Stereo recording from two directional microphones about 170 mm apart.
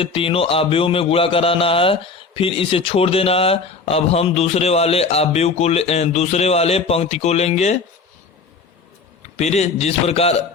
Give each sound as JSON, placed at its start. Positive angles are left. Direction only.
{"t": 0.0, "sound": "speech", "side_deg": 35}
{"t": 9.4, "sound": "speech", "side_deg": 40}